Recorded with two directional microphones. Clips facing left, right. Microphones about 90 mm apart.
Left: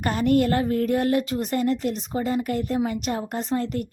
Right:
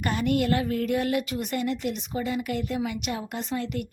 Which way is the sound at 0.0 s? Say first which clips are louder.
Left 4 dB; 40° left (ahead or behind).